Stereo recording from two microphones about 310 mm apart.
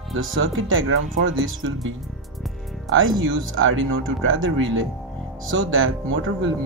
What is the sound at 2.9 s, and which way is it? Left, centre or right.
Speech, right.